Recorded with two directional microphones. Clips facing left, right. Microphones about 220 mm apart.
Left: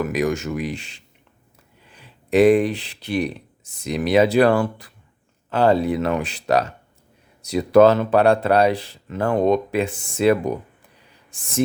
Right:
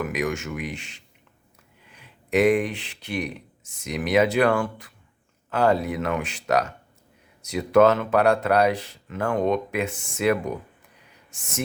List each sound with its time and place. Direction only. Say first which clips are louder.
0.0 s speech: left 5 dB; 35° left (ahead or behind)